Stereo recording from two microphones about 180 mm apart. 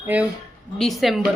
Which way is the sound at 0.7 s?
Centre (ahead or behind).